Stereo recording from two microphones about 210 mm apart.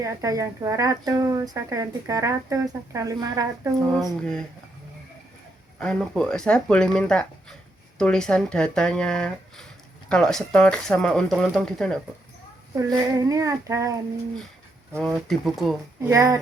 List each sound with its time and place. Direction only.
0.0 s a woman's voice: 15° right (ahead or behind)
4.2 s speech: 5° left (ahead or behind)
5.8 s speech: 5° left (ahead or behind)
12.8 s a woman's voice: 15° right (ahead or behind)
14.9 s speech: centre (ahead or behind)
16.0 s a woman's voice: 15° right (ahead or behind)